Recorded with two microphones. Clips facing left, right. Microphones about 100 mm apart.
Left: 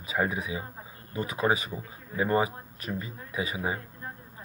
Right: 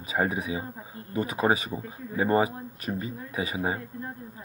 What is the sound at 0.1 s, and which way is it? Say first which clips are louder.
Speech: right 2 dB; 30° right (ahead or behind).